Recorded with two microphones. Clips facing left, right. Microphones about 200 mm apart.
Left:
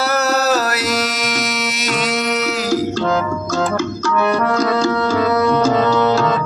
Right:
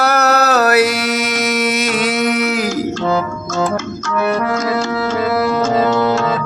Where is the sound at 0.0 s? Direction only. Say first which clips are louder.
Right 3 dB; 65° right (ahead or behind).